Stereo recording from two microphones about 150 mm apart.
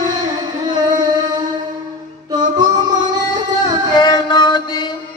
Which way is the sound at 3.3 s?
25° right (ahead or behind).